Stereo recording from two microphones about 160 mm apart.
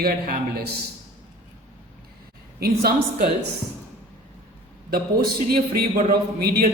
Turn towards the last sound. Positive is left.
turn(degrees=-70)  # may be behind; listen again after turning